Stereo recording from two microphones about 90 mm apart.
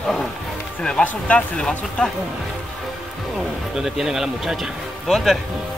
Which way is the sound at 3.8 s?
5° right (ahead or behind).